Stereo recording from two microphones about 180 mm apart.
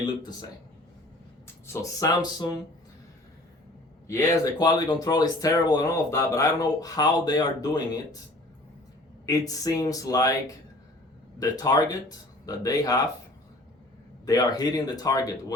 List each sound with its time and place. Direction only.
0.0 s speech: 25° left (ahead or behind)
1.6 s speech: 15° left (ahead or behind)
4.0 s speech: 15° left (ahead or behind)
9.2 s speech: 20° left (ahead or behind)
11.3 s speech: 20° left (ahead or behind)
14.3 s speech: 20° left (ahead or behind)